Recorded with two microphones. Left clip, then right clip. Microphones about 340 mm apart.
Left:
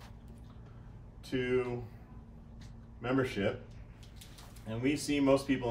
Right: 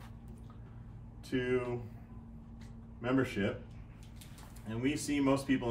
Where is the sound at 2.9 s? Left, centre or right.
Centre.